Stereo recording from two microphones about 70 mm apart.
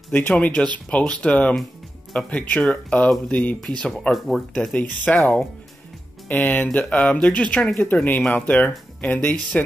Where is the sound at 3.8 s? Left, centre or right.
Centre.